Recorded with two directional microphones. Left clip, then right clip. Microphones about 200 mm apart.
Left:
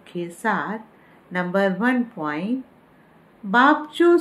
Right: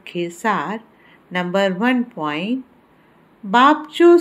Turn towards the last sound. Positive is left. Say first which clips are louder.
# right 4 dB
turn(degrees=-15)  # may be behind; listen again after turning